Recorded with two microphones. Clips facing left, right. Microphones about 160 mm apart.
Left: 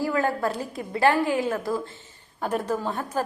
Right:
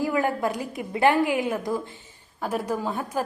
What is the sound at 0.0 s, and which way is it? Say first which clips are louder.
A woman's voice: even; 15° right (ahead or behind).